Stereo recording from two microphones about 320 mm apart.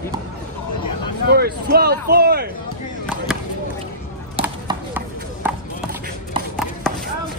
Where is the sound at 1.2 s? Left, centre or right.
Right.